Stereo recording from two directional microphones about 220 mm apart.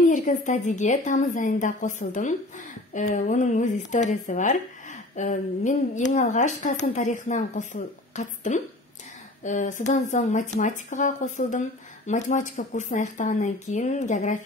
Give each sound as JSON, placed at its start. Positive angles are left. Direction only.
{"t": 0.1, "sound": "a woman's voice", "side_deg": 35}